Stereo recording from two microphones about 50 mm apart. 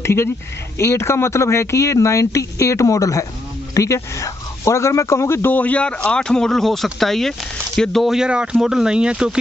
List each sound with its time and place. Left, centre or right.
0.0 s speech: left
5.5 s speech: left; by 8.0 s centre
8.2 s speech: centre